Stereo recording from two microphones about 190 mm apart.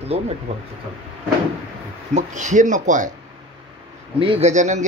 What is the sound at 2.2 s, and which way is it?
Speech, 40° right (ahead or behind).